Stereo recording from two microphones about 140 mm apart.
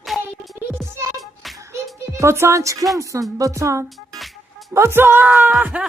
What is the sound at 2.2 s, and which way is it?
Speech, 20° right (ahead or behind).